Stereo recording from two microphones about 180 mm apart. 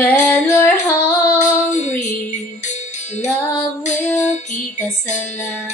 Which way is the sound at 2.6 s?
40° left (ahead or behind).